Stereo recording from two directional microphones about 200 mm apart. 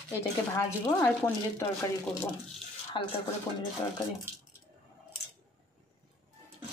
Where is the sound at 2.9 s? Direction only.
25° left (ahead or behind).